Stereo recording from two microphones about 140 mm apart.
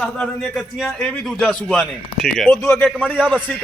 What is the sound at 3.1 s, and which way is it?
Speech, 10° right (ahead or behind).